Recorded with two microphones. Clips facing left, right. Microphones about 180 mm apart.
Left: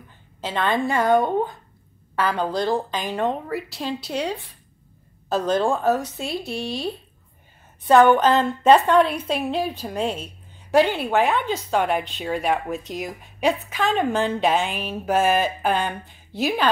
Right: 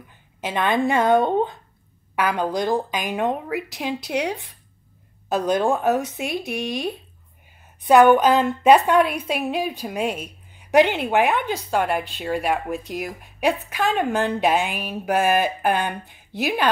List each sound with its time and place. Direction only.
0.4 s a woman's voice: 15° right (ahead or behind)